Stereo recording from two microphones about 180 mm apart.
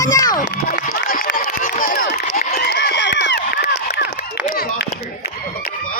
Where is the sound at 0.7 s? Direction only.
55° left (ahead or behind); by 3.6 s 75° left (ahead or behind).